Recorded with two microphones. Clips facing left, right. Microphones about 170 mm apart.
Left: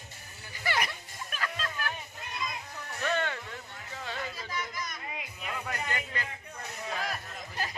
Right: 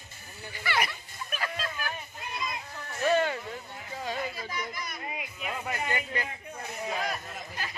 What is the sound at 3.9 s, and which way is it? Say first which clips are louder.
Speech: right 5 dB; 15° right (ahead or behind).